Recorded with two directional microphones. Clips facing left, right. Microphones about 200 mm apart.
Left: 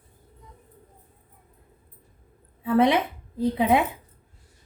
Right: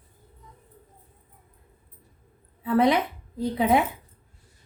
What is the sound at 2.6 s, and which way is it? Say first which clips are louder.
Speech: left 1 dB; 25° left (ahead or behind).